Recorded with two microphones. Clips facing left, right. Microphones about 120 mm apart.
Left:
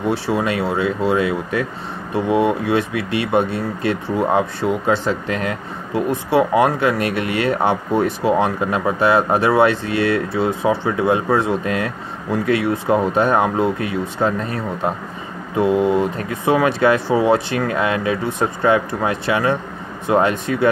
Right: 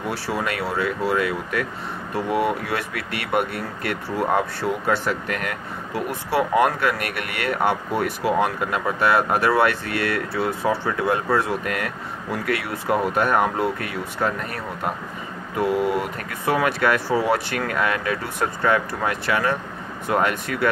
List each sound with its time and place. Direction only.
0.0 s speech: 25° left (ahead or behind)